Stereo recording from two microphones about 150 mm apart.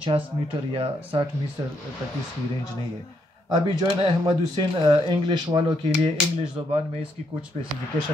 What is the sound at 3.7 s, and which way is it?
Speech, 30° right (ahead or behind).